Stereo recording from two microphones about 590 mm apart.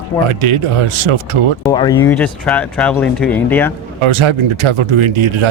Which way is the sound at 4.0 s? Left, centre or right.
Right.